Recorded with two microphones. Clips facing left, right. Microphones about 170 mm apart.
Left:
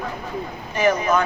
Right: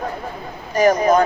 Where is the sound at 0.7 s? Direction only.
40° right (ahead or behind).